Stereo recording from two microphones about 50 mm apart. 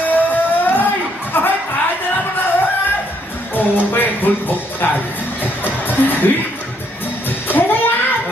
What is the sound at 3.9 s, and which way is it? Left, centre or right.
Music, left.